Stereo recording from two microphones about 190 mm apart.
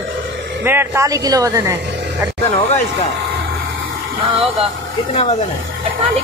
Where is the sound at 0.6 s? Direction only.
10° right (ahead or behind).